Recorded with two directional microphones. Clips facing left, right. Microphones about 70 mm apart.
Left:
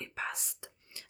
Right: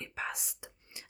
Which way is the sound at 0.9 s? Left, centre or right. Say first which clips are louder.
Right 1 dB; centre.